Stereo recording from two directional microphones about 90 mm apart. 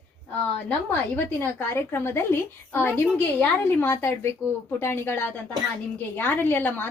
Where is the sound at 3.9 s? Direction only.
30° left (ahead or behind).